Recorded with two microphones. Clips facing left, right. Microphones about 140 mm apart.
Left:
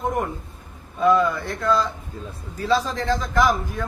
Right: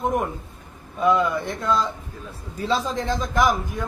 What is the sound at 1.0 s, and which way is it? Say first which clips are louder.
A man's voice: left 1 dB; 20° right (ahead or behind).